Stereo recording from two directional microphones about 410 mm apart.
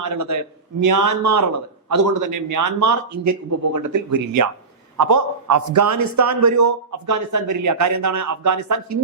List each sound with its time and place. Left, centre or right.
0.0 s a man's voice: right